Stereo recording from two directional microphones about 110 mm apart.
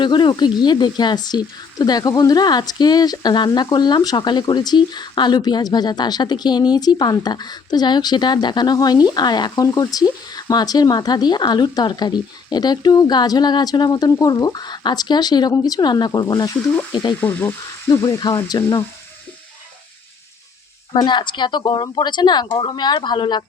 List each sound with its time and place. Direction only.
0.0 s speech: 45° left (ahead or behind)
17.2 s frying: 20° left (ahead or behind)
18.5 s speech: 40° left (ahead or behind)
20.9 s speech: 45° left (ahead or behind)